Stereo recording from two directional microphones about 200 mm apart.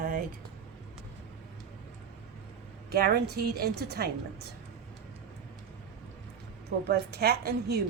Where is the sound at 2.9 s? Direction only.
50° right (ahead or behind).